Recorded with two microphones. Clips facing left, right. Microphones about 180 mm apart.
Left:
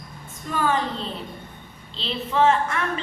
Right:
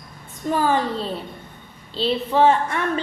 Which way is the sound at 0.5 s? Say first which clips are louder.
Right 3 dB; 35° right (ahead or behind).